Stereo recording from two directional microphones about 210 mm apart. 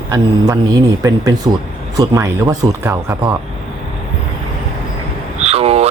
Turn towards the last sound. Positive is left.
turn(degrees=-30)  # may be behind; listen again after turning